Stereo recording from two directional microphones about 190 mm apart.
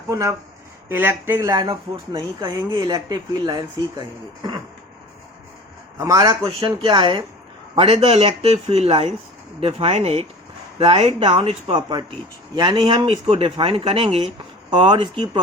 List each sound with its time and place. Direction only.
0.1 s speech: 15° right (ahead or behind)
6.0 s a man's voice: 15° right (ahead or behind)